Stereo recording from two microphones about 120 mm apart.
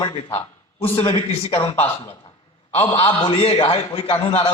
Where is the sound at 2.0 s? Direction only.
55° left (ahead or behind).